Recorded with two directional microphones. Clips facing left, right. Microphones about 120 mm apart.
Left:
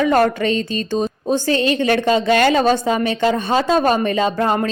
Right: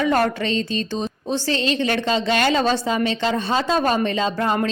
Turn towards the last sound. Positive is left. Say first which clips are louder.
# left 4 dB
turn(degrees=50)  # may be behind; listen again after turning